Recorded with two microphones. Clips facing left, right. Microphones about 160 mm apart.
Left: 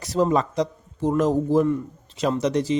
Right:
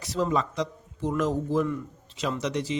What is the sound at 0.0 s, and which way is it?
A man's voice, 40° left (ahead or behind).